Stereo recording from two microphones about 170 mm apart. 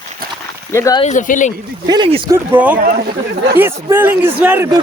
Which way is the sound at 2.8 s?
55° right (ahead or behind).